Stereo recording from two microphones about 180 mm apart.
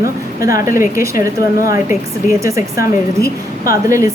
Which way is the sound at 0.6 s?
15° right (ahead or behind).